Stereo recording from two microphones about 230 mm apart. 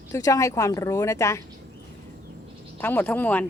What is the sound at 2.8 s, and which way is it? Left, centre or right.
Speech, centre.